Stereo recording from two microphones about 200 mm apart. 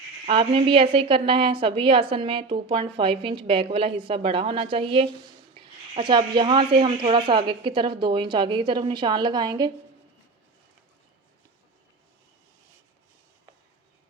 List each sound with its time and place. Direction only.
0.3 s a woman's voice: 25° right (ahead or behind)